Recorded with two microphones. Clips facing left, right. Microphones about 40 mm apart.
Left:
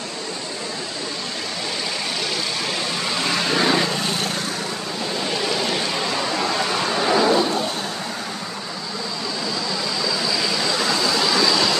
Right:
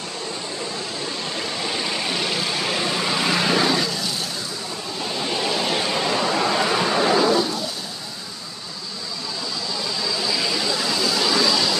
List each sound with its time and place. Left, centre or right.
2.0 s vehicle: centre
3.8 s vehicle: left
5.4 s a sound: centre
11.2 s vehicle: centre